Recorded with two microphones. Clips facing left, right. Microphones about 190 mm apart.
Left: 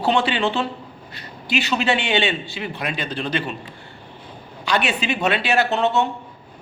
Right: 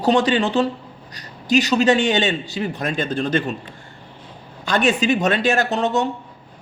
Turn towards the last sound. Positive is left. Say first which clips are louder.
# even
turn(degrees=-40)  # may be behind; listen again after turning